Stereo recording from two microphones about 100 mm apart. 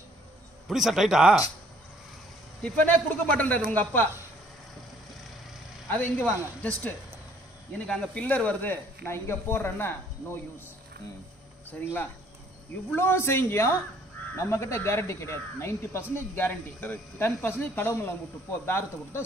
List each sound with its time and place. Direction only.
0.7 s a man's voice: centre (ahead or behind)
2.6 s a man's voice: 15° left (ahead or behind)
5.9 s speech: 20° left (ahead or behind)
12.9 s speech: 25° left (ahead or behind)